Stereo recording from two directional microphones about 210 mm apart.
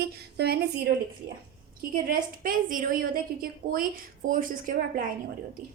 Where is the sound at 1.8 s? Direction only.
45° right (ahead or behind).